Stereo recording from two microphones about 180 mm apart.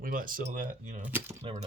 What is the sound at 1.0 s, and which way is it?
Speech, 10° right (ahead or behind).